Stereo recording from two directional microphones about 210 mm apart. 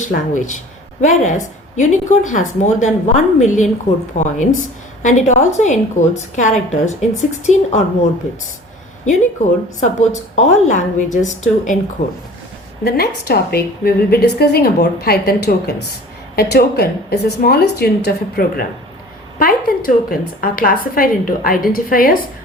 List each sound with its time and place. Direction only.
0.0 s a woman's voice: 35° left (ahead or behind)
9.4 s a woman's voice: 35° left (ahead or behind)
12.8 s a woman's voice: 50° left (ahead or behind)